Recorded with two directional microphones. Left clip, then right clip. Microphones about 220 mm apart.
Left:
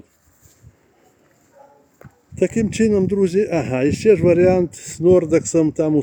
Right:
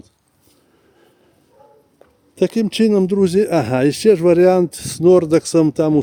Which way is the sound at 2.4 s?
15° right (ahead or behind).